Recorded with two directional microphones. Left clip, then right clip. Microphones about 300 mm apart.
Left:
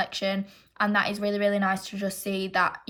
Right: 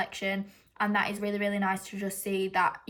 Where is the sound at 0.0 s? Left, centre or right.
Centre.